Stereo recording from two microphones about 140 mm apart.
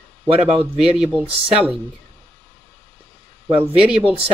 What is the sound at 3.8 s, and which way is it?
Speech, 10° right (ahead or behind).